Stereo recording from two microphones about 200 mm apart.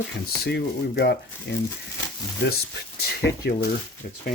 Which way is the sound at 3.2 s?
55° left (ahead or behind).